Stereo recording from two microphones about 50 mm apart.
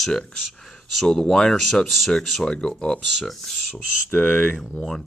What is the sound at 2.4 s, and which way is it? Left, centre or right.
Speech, centre.